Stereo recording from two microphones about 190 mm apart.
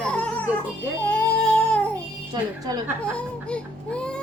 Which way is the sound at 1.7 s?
5° left (ahead or behind).